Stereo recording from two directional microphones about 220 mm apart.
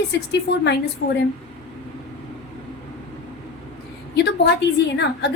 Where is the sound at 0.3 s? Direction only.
50° left (ahead or behind).